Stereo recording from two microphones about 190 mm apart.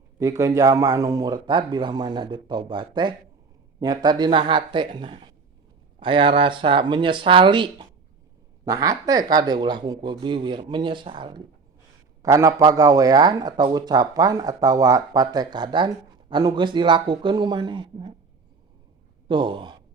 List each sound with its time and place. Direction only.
0.2 s speech: 15° right (ahead or behind)
19.3 s speech: 25° right (ahead or behind)